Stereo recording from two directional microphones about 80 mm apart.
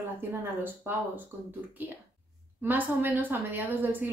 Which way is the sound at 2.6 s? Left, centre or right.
Right.